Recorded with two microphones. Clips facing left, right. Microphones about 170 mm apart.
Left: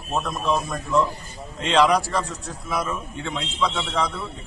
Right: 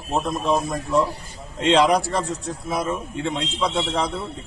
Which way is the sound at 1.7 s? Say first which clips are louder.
Right 2 dB; 25° right (ahead or behind).